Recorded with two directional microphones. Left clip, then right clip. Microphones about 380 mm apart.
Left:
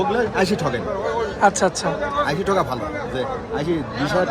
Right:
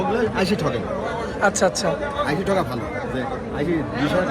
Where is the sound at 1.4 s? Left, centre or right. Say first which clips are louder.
Left 1 dB; centre.